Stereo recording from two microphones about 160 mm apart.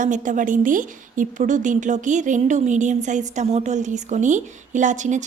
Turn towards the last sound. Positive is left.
turn(degrees=-50)  # may be behind; listen again after turning